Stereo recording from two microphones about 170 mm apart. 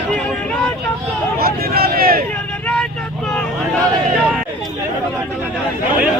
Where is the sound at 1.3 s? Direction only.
60° right (ahead or behind).